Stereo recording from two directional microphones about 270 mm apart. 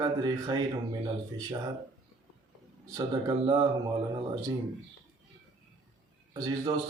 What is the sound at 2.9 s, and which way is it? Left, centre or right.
Speech, centre.